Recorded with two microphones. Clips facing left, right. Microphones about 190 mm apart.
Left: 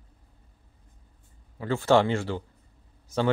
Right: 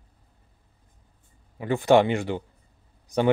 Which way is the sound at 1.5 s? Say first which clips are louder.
Right 3 dB; 15° right (ahead or behind).